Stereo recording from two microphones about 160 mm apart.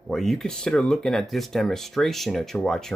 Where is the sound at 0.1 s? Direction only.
Centre (ahead or behind).